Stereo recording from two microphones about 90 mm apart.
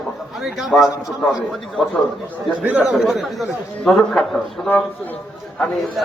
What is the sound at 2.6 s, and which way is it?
Speech, 20° right (ahead or behind).